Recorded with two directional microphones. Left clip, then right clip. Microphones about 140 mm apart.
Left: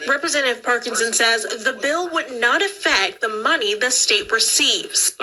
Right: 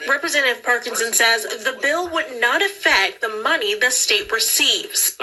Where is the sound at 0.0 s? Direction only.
30° left (ahead or behind).